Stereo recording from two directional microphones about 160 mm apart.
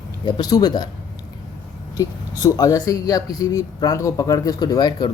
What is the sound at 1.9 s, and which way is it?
Speech, 20° left (ahead or behind).